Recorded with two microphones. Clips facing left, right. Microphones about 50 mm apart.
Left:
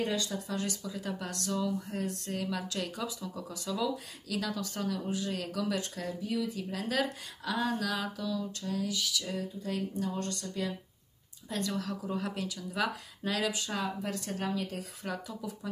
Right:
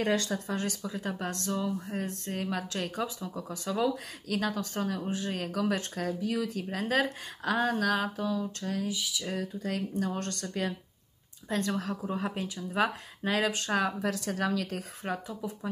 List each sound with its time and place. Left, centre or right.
0.0 s speech: right
0.5 s speech: right
5.9 s speech: right
6.7 s speech: right
8.9 s a sound: centre
9.3 s speech: right
11.4 s speech: right
14.1 s a woman's voice: right
15.0 s speech: right